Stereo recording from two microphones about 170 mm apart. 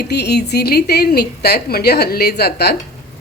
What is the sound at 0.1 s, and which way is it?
A woman's voice, 75° left (ahead or behind).